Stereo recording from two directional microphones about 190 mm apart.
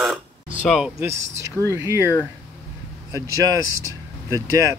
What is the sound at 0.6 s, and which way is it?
Speech, centre (ahead or behind).